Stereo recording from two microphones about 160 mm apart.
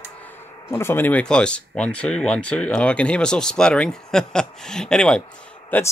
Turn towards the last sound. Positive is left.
turn(degrees=10)  # may be behind; listen again after turning